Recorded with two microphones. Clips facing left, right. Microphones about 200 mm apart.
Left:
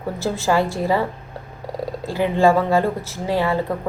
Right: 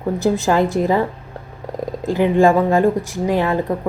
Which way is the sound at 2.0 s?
20° right (ahead or behind).